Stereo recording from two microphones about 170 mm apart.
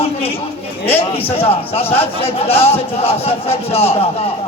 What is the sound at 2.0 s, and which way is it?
Speech, 35° left (ahead or behind).